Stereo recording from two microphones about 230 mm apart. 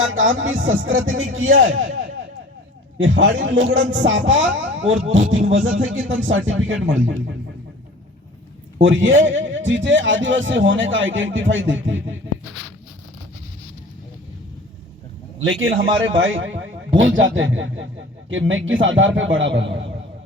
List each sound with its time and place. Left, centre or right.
0.0 s a man's voice: right
3.0 s a man's voice: right
8.8 s a man's voice: right
15.4 s a man's voice: right